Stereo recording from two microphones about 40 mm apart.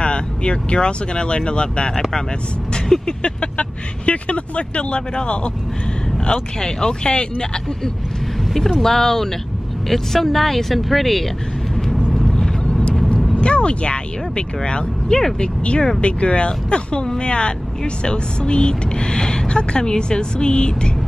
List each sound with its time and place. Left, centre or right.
0.0 s speech: left
3.1 s speech: left
8.5 s speech: centre
12.1 s vehicle: centre
12.6 s vehicle: left
13.4 s speech: left